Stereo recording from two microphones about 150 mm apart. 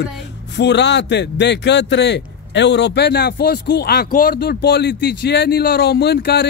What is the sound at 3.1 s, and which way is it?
Speech, 90° left.